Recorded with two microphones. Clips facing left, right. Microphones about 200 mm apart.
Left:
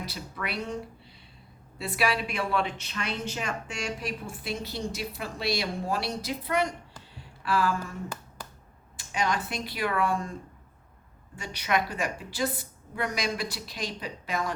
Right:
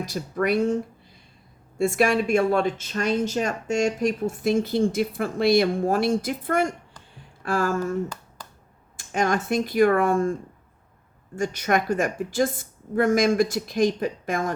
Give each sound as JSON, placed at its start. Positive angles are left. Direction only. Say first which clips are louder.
{"t": 0.0, "sound": "speech", "louder": "right 11 dB", "side_deg": -45}
{"t": 1.8, "sound": "speech", "louder": "right 8 dB", "side_deg": -45}
{"t": 9.0, "sound": "speech", "louder": "right 6 dB", "side_deg": -50}
{"t": 11.3, "sound": "speech", "louder": "right 6 dB", "side_deg": -45}